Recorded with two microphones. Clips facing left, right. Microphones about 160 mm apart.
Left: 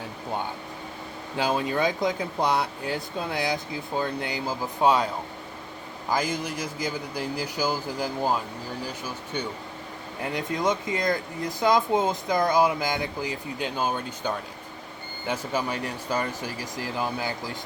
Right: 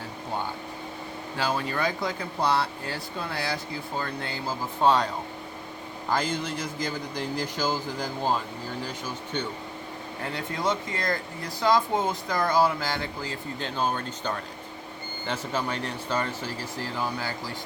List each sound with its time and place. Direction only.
1.4 s speech: 20° left (ahead or behind)
6.1 s speech: 10° left (ahead or behind)
10.3 s speech: 15° left (ahead or behind)